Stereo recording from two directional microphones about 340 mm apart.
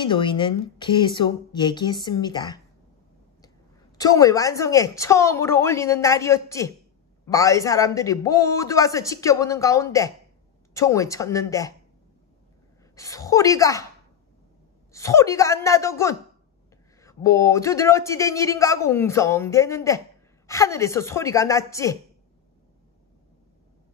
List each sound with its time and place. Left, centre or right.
0.0 s a man's voice: centre
4.0 s a man's voice: centre
12.9 s a woman's voice: centre
14.9 s a man's voice: centre